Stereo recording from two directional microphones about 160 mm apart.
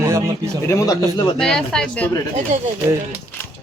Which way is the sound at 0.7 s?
20° left (ahead or behind).